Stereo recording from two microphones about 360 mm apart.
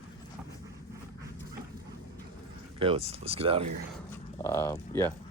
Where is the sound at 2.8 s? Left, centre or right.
Centre.